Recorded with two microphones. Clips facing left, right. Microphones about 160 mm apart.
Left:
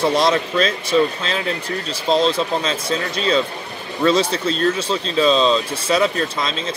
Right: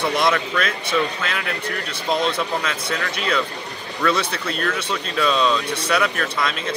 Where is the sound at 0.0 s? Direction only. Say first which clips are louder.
Left 3 dB; 25° left (ahead or behind).